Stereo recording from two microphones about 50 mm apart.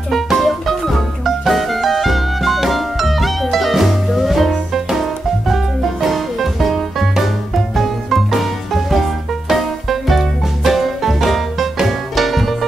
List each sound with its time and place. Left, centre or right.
0.3 s music: centre
6.0 s music: centre